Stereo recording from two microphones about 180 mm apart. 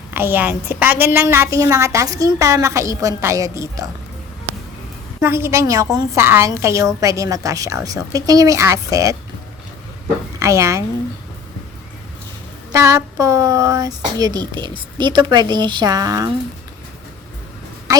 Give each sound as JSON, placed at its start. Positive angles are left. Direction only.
{"t": 0.1, "sound": "a woman's voice", "side_deg": -10}
{"t": 5.2, "sound": "a woman's voice", "side_deg": -15}
{"t": 10.4, "sound": "a woman's voice", "side_deg": -15}
{"t": 12.7, "sound": "speech", "side_deg": -15}